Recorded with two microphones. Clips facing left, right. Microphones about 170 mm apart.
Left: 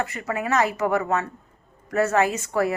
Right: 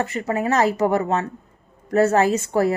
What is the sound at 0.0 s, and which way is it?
A woman's voice, 30° right (ahead or behind).